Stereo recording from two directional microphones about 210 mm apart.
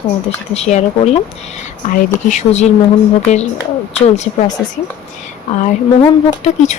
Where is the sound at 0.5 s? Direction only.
30° left (ahead or behind).